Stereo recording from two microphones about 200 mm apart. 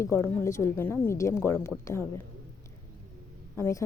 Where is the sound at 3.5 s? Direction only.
15° left (ahead or behind).